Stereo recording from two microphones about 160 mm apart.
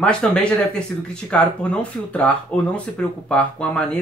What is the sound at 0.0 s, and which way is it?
Speech, 5° left (ahead or behind).